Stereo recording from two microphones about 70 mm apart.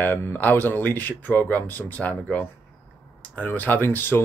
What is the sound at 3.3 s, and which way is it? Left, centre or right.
Speech, left.